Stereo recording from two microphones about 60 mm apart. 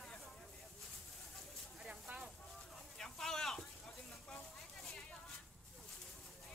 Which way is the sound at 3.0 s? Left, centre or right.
Centre.